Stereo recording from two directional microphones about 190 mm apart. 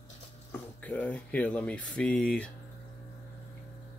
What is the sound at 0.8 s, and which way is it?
Speech, 5° left (ahead or behind).